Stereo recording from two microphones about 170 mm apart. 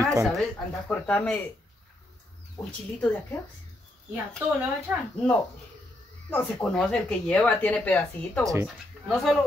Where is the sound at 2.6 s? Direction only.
20° left (ahead or behind).